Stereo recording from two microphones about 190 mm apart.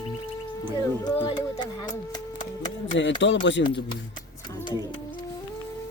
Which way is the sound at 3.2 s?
70° left (ahead or behind).